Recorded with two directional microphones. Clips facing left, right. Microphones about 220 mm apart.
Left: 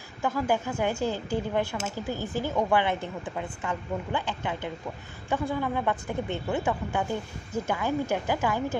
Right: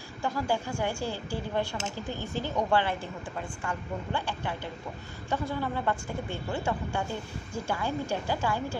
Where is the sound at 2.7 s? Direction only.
20° left (ahead or behind).